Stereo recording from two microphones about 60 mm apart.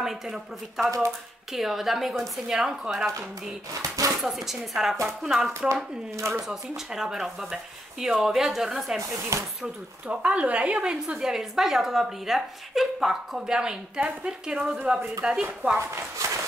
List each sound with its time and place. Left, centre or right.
0.0 s speech: centre
4.2 s speech: centre
6.1 s speech: right
6.4 s speech: centre
9.3 s speech: right
10.0 s speech: centre
11.1 s speech: centre
15.9 s speech: right